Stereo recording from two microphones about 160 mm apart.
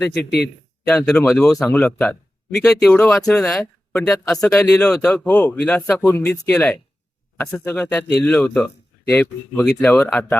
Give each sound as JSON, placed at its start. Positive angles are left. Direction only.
{"t": 0.1, "sound": "a man's voice", "side_deg": 90}
{"t": 0.9, "sound": "speech", "side_deg": 5}